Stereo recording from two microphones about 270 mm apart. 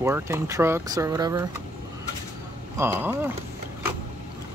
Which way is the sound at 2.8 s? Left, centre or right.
Centre.